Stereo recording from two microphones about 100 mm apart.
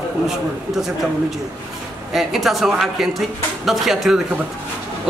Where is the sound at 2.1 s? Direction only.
Centre (ahead or behind).